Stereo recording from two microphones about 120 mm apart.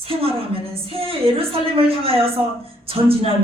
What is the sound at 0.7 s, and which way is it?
A woman's voice, 50° right (ahead or behind).